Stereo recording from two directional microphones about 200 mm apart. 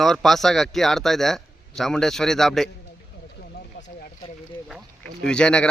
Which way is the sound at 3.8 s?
60° left (ahead or behind).